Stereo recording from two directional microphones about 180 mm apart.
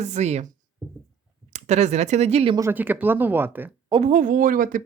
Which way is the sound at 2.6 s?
10° right (ahead or behind).